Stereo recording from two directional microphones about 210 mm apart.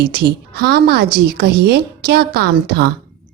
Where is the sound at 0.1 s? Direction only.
45° right (ahead or behind).